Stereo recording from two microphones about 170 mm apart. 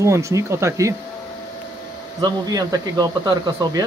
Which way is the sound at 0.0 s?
15° right (ahead or behind).